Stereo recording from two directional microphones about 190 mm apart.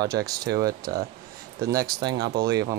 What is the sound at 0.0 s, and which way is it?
Speech, 20° right (ahead or behind).